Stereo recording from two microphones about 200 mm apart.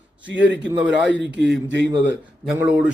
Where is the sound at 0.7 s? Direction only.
10° right (ahead or behind).